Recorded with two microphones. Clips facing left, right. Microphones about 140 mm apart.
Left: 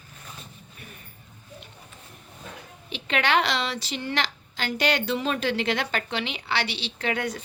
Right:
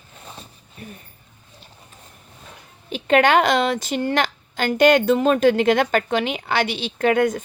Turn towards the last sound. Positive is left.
turn(degrees=-50)  # may be behind; listen again after turning